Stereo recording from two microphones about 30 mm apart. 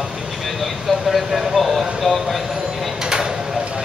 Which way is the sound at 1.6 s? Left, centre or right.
Centre.